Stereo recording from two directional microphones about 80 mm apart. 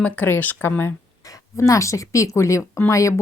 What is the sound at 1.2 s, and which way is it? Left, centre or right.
A woman's voice, left.